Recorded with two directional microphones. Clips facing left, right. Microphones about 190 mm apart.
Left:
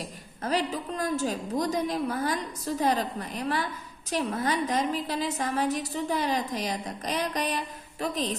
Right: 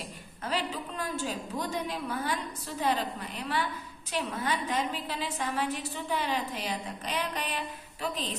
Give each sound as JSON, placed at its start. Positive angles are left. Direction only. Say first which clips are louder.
{"t": 0.0, "sound": "a woman's voice", "louder": "left 5 dB", "side_deg": 40}